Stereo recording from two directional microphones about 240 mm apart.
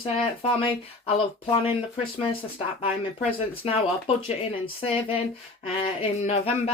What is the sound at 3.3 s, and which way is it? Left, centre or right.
Speech, left.